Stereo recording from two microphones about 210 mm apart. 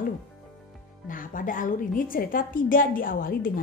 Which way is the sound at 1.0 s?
40° left (ahead or behind).